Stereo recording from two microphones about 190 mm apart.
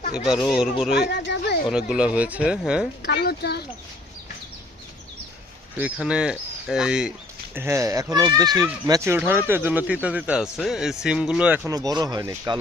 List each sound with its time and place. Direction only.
0.3 s speech: centre (ahead or behind)
1.0 s speech: 60° left (ahead or behind)
1.7 s speech: 5° right (ahead or behind)
3.1 s speech: 60° left (ahead or behind)
5.7 s speech: 5° right (ahead or behind)